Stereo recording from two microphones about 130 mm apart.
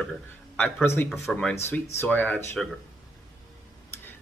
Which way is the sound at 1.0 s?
Centre (ahead or behind).